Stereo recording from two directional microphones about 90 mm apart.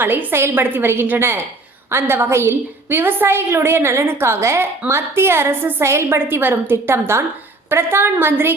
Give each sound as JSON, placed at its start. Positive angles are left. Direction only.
{"t": 0.0, "sound": "a woman's voice", "side_deg": -20}